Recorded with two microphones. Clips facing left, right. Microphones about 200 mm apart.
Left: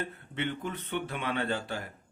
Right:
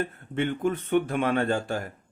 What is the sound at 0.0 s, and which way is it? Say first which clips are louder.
Speech: right 6 dB; 45° right (ahead or behind).